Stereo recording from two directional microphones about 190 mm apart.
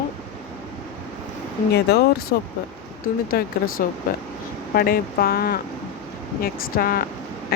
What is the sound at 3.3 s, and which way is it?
Speech, 55° left (ahead or behind).